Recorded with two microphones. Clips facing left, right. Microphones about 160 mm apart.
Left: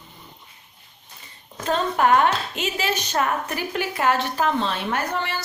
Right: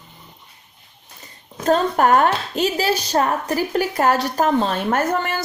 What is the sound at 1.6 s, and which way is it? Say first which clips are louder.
A woman's voice: right 4 dB; 45° right (ahead or behind).